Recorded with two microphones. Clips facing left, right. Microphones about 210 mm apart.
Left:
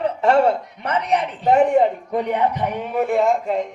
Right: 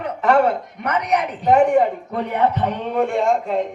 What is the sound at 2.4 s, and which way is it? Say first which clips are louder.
Speech: right 2 dB; 10° left (ahead or behind).